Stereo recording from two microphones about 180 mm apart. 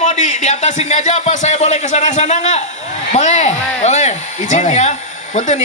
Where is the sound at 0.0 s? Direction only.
40° left (ahead or behind).